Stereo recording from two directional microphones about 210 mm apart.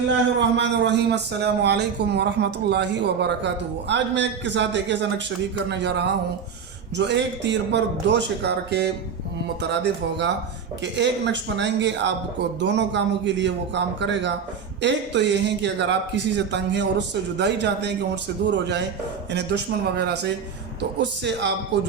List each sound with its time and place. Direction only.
0.3 s speech: 55° right (ahead or behind)